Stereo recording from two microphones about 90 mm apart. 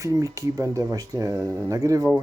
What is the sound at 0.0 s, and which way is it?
Speech, 35° right (ahead or behind).